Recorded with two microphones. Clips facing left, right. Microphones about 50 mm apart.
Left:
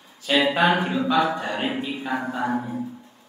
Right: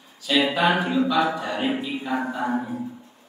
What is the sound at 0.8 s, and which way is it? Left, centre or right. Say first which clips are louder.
Music: right 2 dB; centre.